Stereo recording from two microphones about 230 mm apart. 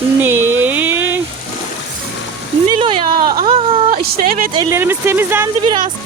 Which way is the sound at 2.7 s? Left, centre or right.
Right.